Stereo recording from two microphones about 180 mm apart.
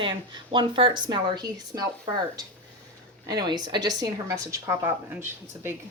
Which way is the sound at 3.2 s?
25° right (ahead or behind).